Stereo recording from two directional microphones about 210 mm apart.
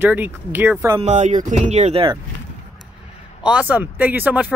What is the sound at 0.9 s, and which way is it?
Speech, 35° right (ahead or behind).